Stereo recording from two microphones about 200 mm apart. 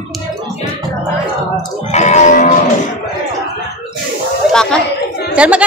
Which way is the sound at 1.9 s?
35° left (ahead or behind).